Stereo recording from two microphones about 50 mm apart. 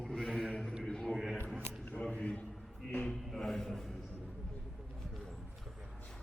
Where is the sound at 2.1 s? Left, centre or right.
Left.